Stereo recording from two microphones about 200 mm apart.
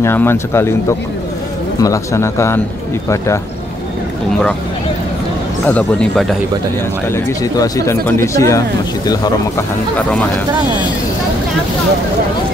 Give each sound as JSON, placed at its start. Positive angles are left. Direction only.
{"t": 0.0, "sound": "speech", "side_deg": 10}
{"t": 5.7, "sound": "speech", "side_deg": 5}
{"t": 7.1, "sound": "speech", "side_deg": 15}